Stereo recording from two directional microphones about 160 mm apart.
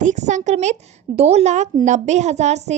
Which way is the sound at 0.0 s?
50° right (ahead or behind).